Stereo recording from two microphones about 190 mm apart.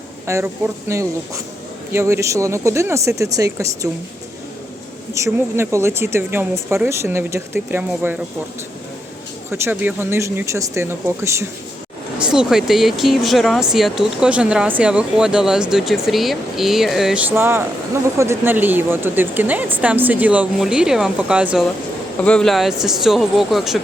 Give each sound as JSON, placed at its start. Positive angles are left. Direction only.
{"t": 0.3, "sound": "speech", "side_deg": -15}
{"t": 5.1, "sound": "speech", "side_deg": -15}
{"t": 9.5, "sound": "speech", "side_deg": -10}
{"t": 12.2, "sound": "speech", "side_deg": -5}